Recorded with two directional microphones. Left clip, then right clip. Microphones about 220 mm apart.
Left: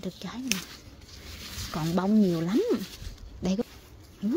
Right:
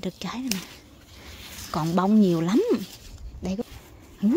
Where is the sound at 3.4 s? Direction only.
Centre (ahead or behind).